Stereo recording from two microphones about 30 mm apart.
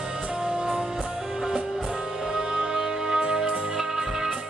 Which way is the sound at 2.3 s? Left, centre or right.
Right.